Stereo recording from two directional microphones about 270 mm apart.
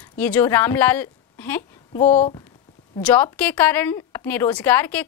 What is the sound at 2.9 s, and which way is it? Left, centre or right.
A woman's voice, centre.